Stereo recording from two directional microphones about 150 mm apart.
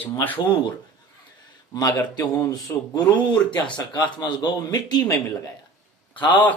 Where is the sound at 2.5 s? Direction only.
25° left (ahead or behind).